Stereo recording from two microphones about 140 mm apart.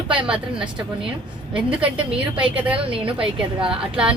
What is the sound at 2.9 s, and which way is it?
Speech, 40° right (ahead or behind).